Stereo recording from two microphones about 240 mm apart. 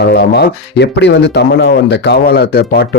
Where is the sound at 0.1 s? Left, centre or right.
Left.